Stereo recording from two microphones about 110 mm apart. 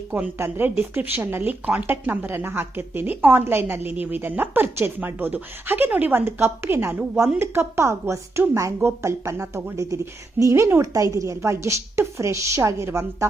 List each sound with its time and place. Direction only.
0.1 s a woman's voice: 20° right (ahead or behind)